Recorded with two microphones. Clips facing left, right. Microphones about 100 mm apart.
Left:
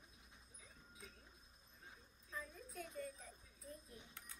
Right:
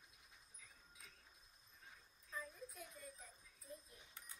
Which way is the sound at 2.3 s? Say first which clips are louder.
Even; 5° right (ahead or behind).